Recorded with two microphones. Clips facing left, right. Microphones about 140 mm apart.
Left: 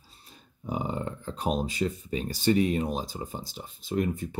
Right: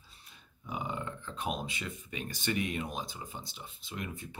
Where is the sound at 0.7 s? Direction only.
35° left (ahead or behind).